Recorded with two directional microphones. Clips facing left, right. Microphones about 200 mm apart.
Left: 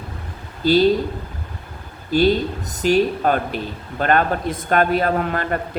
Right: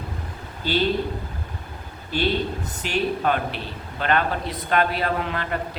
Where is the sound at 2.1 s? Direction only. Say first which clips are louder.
Left 7 dB; 40° left (ahead or behind).